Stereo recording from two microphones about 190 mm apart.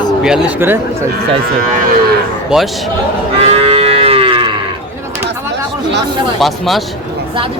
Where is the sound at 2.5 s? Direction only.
5° right (ahead or behind).